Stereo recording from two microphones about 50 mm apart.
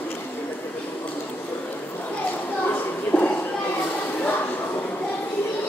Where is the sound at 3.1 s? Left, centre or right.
Left.